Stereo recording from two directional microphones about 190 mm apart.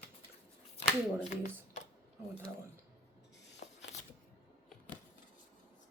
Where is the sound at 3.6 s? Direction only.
60° left (ahead or behind).